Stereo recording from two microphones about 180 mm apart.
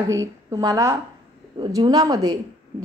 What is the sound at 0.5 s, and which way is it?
A woman's voice, 20° right (ahead or behind).